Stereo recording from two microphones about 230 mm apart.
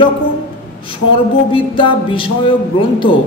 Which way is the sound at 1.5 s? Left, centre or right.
Left.